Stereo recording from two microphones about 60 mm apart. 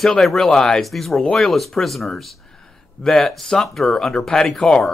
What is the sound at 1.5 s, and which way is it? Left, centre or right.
Speech, centre.